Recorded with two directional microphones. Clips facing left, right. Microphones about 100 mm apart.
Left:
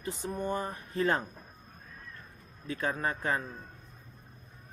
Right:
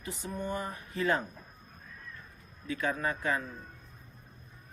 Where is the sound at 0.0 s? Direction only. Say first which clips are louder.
Left 3 dB; 40° left (ahead or behind).